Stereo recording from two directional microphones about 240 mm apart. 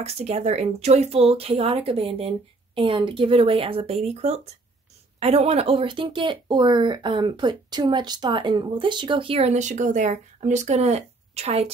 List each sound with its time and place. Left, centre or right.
0.0 s speech: right